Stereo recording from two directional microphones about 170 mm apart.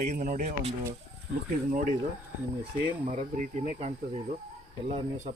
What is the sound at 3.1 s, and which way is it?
Speech, 50° right (ahead or behind).